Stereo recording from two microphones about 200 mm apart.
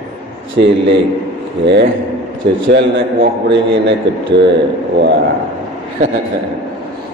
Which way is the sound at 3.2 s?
60° right (ahead or behind).